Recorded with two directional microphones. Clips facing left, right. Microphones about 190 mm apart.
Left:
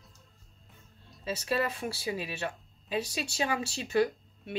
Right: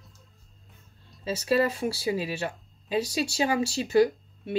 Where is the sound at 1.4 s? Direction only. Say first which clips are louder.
Right 7 dB; 30° right (ahead or behind).